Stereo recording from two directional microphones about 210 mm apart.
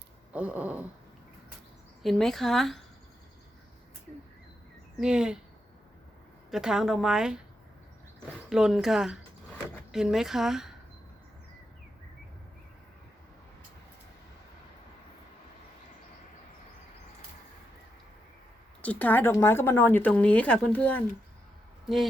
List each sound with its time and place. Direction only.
0.3 s a sound: 5° right (ahead or behind)
2.0 s speech: centre (ahead or behind)
4.9 s speech: 5° right (ahead or behind)
6.5 s speech: centre (ahead or behind)
8.4 s speech: centre (ahead or behind)
18.8 s speech: 5° left (ahead or behind)